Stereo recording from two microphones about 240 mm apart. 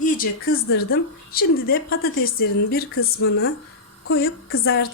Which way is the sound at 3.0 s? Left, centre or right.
Left.